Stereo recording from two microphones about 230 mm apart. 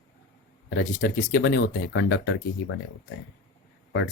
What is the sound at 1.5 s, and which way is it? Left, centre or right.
Speech, left.